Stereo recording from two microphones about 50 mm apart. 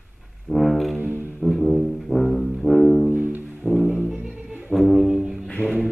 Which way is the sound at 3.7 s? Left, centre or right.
Centre.